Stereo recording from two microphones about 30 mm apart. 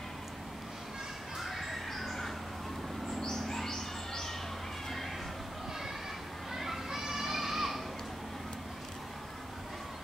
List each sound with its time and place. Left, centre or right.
1.4 s a sound: centre
3.2 s bird: centre
6.5 s children playing: centre